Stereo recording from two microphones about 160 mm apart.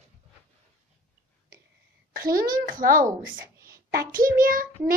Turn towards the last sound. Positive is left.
turn(degrees=-65)  # may be behind; listen again after turning